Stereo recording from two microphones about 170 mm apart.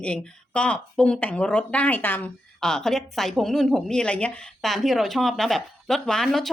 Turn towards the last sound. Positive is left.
turn(degrees=0)  # may be behind; listen again after turning